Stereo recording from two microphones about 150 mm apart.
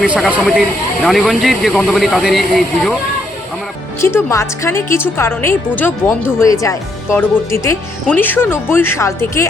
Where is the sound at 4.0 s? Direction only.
20° left (ahead or behind).